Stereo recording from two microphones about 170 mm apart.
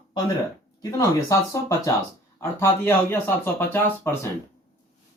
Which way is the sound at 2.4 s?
15° left (ahead or behind).